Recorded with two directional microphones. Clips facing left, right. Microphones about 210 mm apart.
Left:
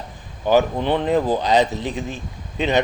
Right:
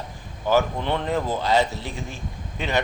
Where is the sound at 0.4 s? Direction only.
15° left (ahead or behind).